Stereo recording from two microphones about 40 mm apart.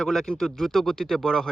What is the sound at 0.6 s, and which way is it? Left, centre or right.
Speech, centre.